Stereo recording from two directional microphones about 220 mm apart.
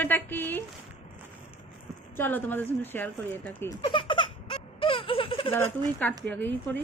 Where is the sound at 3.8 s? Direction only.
20° left (ahead or behind).